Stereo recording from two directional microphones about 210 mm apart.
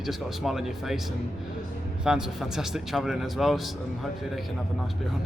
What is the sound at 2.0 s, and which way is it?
A man's voice, 5° right (ahead or behind).